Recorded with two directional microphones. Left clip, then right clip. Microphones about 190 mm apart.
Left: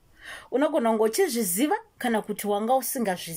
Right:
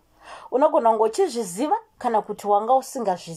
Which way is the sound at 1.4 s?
30° left (ahead or behind).